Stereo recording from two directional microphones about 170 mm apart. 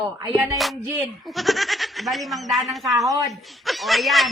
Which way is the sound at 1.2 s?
Centre (ahead or behind).